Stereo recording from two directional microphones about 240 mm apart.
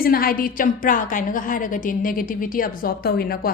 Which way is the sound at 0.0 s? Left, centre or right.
Left.